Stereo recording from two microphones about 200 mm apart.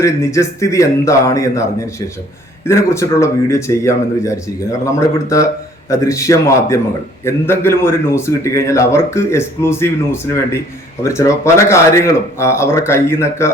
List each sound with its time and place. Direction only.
0.0 s a man's voice: 15° left (ahead or behind)